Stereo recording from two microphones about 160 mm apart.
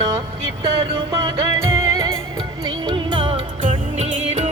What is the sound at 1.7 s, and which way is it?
Music, 20° right (ahead or behind).